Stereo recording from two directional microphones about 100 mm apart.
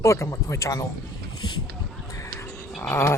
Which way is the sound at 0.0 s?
30° left (ahead or behind).